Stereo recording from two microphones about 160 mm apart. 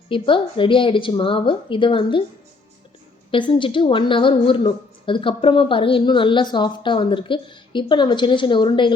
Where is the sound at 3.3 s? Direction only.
30° left (ahead or behind).